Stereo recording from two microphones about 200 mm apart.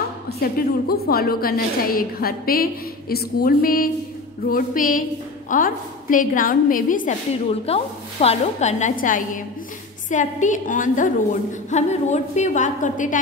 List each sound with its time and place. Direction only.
0.3 s a woman's voice: 50° left (ahead or behind)
7.6 s a woman's voice: 30° left (ahead or behind)